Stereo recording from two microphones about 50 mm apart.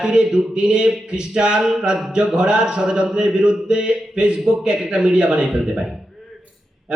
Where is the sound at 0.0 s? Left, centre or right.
Centre.